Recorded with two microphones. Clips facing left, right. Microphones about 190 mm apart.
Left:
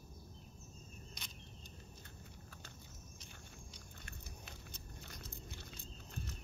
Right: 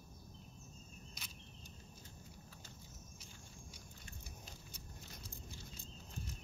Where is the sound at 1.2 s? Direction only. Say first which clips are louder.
Left 1 dB; 5° right (ahead or behind).